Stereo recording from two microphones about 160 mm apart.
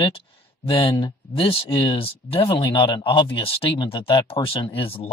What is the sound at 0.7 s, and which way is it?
Speech, 35° left (ahead or behind).